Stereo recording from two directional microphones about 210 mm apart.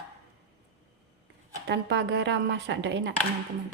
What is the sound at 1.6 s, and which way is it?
A woman's voice, 55° right (ahead or behind).